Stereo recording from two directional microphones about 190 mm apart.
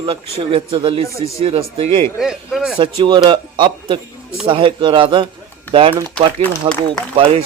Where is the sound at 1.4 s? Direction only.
30° right (ahead or behind).